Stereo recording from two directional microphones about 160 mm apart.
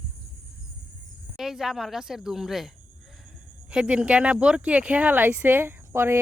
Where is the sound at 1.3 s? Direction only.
Centre (ahead or behind).